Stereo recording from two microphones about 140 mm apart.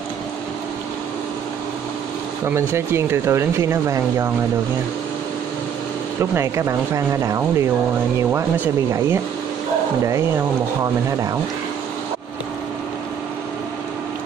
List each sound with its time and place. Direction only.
2.4 s speech: 20° right (ahead or behind)
6.3 s speech: 20° right (ahead or behind)